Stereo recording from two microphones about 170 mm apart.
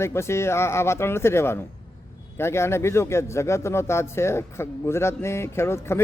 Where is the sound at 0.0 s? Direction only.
15° left (ahead or behind).